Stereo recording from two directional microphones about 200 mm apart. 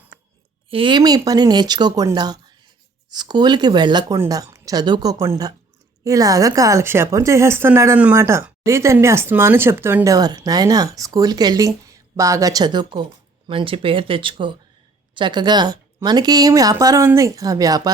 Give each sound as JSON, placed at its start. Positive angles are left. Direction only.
{"t": 0.7, "sound": "a woman's voice", "side_deg": -25}